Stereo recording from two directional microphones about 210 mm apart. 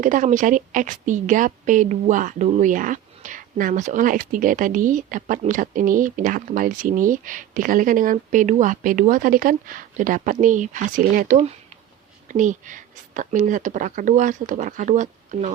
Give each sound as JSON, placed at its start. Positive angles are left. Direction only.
{"t": 0.0, "sound": "a woman's voice", "side_deg": -40}